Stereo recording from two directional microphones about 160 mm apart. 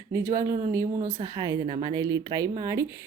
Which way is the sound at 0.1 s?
15° right (ahead or behind).